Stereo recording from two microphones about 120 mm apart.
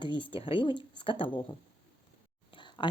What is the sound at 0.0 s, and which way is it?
Speech, 45° left (ahead or behind).